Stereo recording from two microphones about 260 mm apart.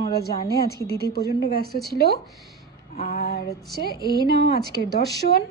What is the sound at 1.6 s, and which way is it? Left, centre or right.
Speech, right.